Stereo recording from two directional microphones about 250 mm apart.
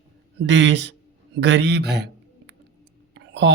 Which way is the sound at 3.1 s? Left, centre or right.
Right.